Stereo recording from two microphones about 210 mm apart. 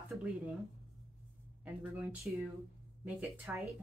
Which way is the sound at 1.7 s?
5° right (ahead or behind).